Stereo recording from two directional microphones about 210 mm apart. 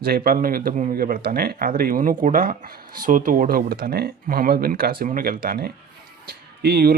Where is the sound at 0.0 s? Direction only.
45° right (ahead or behind).